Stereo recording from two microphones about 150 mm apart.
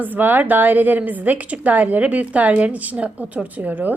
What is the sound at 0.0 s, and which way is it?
A woman's voice, 10° right (ahead or behind).